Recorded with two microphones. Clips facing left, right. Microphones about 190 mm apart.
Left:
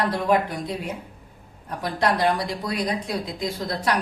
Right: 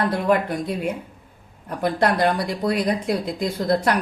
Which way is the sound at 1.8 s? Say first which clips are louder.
Right 3 dB; 55° right (ahead or behind).